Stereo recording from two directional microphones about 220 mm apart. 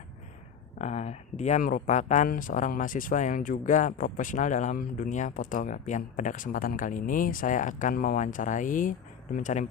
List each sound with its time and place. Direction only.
0.8 s speech: 30° left (ahead or behind)